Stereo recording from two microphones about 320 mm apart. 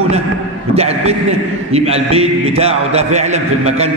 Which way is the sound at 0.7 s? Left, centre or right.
Centre.